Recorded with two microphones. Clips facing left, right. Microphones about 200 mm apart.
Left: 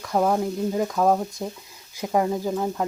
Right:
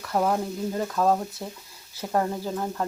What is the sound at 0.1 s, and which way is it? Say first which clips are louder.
Speech: left 3 dB; 10° left (ahead or behind).